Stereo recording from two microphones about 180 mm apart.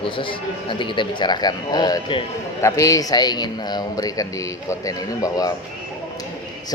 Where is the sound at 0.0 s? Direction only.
30° left (ahead or behind).